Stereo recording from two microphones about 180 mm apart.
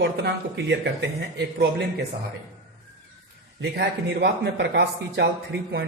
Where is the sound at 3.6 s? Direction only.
65° right (ahead or behind).